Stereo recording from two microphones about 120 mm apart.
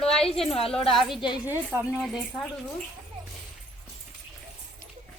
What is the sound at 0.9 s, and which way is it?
Speech, centre (ahead or behind).